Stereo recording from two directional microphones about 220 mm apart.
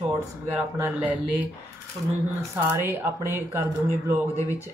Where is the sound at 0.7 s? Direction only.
10° right (ahead or behind).